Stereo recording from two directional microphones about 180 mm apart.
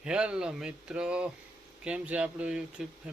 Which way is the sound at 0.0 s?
5° right (ahead or behind).